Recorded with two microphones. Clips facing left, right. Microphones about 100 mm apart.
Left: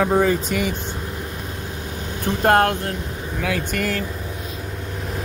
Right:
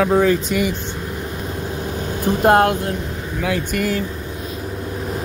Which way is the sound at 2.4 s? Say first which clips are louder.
Right 2 dB; 15° right (ahead or behind).